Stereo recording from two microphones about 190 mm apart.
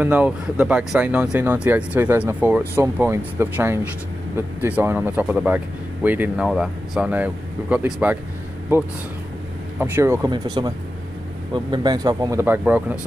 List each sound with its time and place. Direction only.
0.0 s speech: 5° right (ahead or behind)